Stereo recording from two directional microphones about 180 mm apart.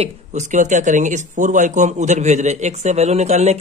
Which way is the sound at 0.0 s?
40° right (ahead or behind).